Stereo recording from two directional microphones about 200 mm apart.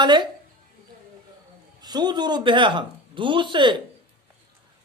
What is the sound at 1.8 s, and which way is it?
Speech, 20° right (ahead or behind).